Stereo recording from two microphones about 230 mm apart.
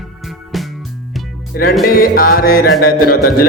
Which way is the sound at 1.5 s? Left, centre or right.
Left.